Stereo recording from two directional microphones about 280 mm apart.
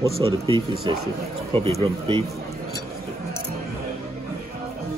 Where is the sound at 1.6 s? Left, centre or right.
Centre.